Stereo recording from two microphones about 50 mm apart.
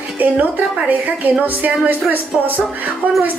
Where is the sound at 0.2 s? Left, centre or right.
Right.